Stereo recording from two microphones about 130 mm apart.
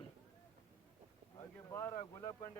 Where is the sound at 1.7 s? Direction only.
20° left (ahead or behind).